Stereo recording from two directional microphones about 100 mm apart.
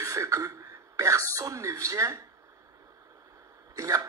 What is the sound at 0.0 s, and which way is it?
Speech, 30° right (ahead or behind).